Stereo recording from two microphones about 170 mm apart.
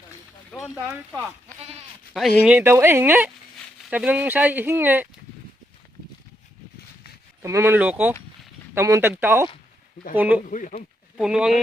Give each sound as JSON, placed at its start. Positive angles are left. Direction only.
{"t": 0.9, "sound": "speech", "side_deg": -15}
{"t": 2.1, "sound": "speech", "side_deg": 0}
{"t": 7.4, "sound": "speech", "side_deg": -15}
{"t": 10.4, "sound": "speech", "side_deg": 50}
{"t": 11.2, "sound": "speech", "side_deg": -5}